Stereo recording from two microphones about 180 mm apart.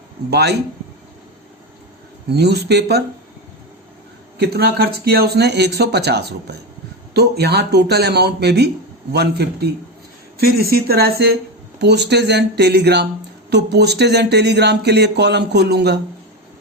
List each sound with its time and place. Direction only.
0.3 s speech: 65° right (ahead or behind)
2.3 s speech: 65° right (ahead or behind)
4.4 s speech: 65° right (ahead or behind)